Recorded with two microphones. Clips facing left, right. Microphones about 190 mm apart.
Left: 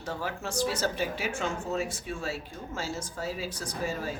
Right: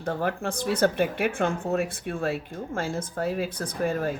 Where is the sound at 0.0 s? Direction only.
55° right (ahead or behind).